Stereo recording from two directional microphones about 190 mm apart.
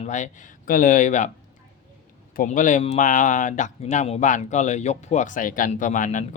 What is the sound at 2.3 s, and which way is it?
Speech, 45° left (ahead or behind).